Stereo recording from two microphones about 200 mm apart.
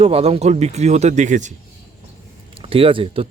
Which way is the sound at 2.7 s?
25° right (ahead or behind).